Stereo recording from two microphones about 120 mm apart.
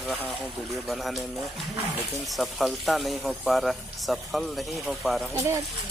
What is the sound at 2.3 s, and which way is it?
Speech, centre (ahead or behind).